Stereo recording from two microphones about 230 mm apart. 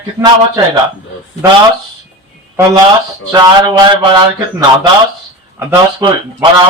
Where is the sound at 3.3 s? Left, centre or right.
Centre.